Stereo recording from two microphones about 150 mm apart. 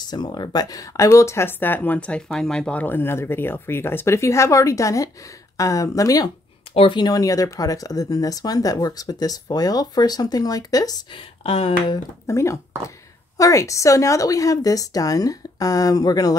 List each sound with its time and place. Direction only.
0.1 s speech: 30° left (ahead or behind)
6.7 s speech: 35° left (ahead or behind)
12.3 s speech: 20° left (ahead or behind)